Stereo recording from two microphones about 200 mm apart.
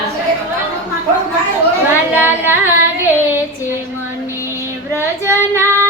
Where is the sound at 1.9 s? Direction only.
10° right (ahead or behind).